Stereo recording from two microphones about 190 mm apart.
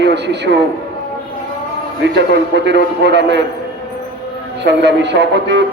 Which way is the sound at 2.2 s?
65° right (ahead or behind).